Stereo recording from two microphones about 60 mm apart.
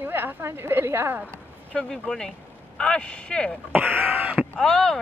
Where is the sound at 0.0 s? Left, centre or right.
Right.